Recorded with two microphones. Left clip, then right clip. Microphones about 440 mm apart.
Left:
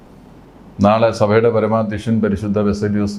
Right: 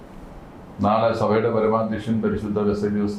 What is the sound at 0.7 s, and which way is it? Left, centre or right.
Speech, left.